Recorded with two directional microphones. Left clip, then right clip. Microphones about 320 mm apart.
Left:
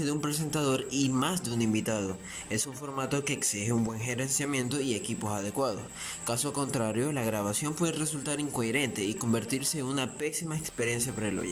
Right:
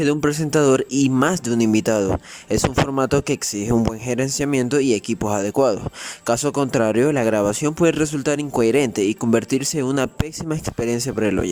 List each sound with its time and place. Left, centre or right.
0.0 s speech: right